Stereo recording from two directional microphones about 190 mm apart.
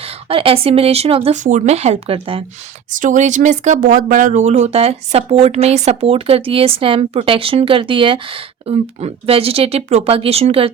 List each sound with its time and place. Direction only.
0.0 s speech: 30° right (ahead or behind)
2.9 s speech: 40° right (ahead or behind)